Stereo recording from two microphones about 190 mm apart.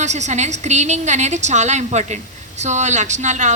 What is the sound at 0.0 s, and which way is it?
Speech, 40° right (ahead or behind).